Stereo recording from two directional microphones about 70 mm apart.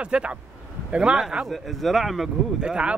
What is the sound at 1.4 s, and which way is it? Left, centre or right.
Speech, centre.